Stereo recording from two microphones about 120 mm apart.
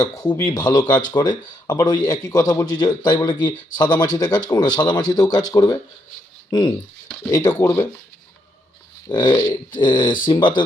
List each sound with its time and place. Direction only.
0.0 s speech: 30° left (ahead or behind)
9.0 s speech: 40° left (ahead or behind)